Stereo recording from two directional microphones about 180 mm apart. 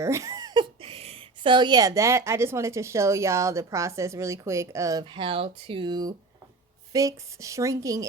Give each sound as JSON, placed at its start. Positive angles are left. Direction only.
{"t": 0.0, "sound": "speech", "side_deg": -15}